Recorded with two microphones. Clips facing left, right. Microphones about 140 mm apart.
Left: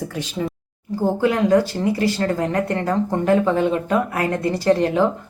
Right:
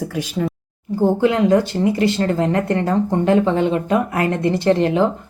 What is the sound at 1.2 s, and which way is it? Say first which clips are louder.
Speech: left 1 dB; 25° right (ahead or behind).